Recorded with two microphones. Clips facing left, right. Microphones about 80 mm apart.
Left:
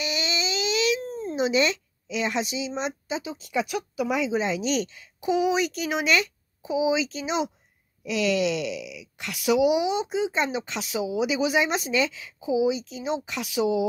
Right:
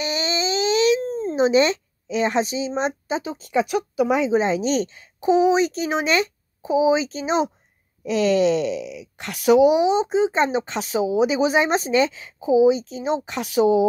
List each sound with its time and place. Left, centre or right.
0.0 s speech: right